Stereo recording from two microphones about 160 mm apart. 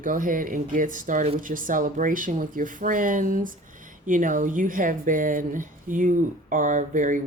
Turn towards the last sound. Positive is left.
turn(degrees=-55)  # may be behind; listen again after turning